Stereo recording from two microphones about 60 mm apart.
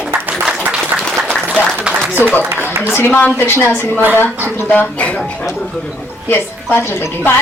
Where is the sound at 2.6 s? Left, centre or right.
Right.